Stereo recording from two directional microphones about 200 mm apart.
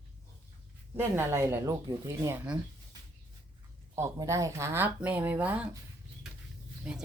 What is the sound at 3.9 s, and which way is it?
Speech, 15° right (ahead or behind).